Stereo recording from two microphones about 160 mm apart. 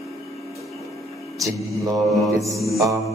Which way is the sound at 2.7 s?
20° right (ahead or behind).